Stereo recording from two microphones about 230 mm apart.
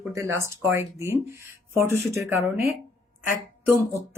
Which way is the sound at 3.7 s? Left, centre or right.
Centre.